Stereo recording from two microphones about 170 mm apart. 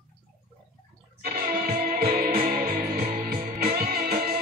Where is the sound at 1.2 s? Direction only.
65° right (ahead or behind).